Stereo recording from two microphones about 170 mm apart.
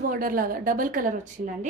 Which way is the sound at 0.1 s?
55° right (ahead or behind).